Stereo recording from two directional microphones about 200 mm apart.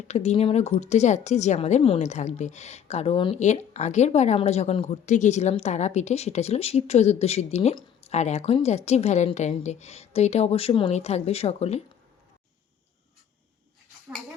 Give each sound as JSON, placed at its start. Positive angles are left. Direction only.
{"t": 0.1, "sound": "speech", "side_deg": 30}